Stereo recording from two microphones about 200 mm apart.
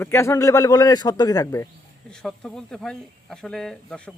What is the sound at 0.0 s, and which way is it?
A man's voice, 15° left (ahead or behind).